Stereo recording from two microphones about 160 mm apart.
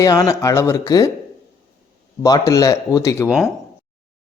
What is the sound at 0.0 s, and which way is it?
Speech, 20° left (ahead or behind).